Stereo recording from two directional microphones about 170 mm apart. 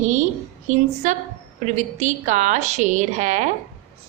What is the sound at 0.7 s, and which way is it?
A woman's voice, 45° right (ahead or behind).